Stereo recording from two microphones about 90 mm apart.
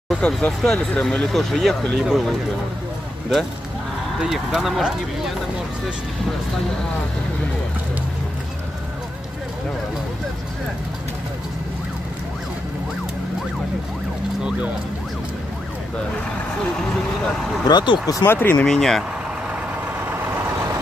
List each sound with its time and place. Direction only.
0.2 s speech: 15° left (ahead or behind)
4.2 s speech: 5° right (ahead or behind)
17.6 s speech: 55° left (ahead or behind)
18.2 s speech: 25° left (ahead or behind)
18.6 s speech: 5° left (ahead or behind)